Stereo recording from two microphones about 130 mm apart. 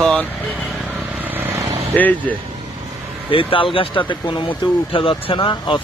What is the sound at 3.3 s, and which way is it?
Speech, 45° left (ahead or behind).